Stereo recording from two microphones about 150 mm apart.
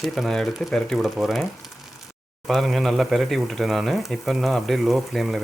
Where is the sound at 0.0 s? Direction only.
Centre (ahead or behind).